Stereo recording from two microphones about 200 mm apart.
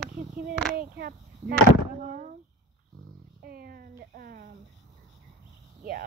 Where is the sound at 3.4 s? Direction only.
50° right (ahead or behind).